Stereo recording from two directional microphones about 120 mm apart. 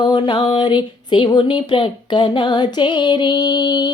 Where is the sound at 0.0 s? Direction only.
40° left (ahead or behind).